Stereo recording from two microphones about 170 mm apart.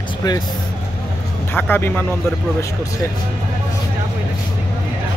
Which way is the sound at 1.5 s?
10° left (ahead or behind).